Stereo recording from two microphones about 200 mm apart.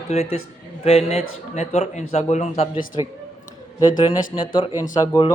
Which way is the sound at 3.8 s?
20° left (ahead or behind).